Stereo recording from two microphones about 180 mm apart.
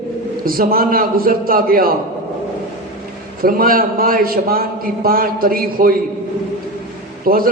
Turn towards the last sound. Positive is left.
turn(degrees=-55)  # may be behind; listen again after turning